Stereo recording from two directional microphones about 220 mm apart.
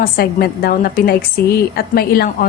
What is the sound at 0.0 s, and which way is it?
A woman's voice, 45° left (ahead or behind).